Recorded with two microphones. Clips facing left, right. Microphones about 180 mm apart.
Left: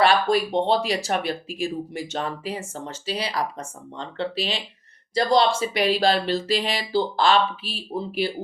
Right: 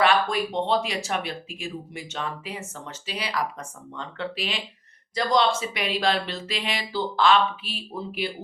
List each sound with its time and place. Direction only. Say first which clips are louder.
0.0 s speech: left 3 dB; 35° left (ahead or behind)